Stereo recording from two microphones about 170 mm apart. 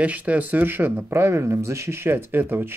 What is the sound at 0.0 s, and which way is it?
Speech, 10° right (ahead or behind).